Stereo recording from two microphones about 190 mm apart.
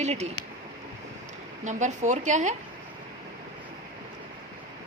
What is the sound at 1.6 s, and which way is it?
Speech, 40° right (ahead or behind).